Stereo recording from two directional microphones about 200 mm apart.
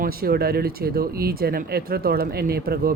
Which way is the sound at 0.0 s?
50° right (ahead or behind).